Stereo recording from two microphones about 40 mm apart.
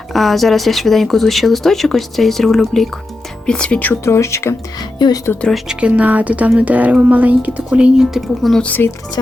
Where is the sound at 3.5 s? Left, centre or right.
Left.